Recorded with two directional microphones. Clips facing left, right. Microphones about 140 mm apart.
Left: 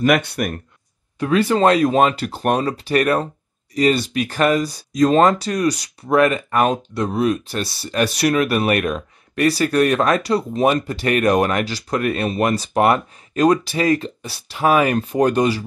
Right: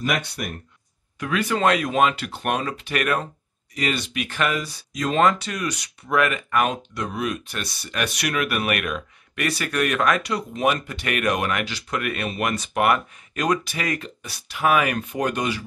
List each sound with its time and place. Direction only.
0.0 s speech: 60° left (ahead or behind)
1.2 s speech: 30° left (ahead or behind)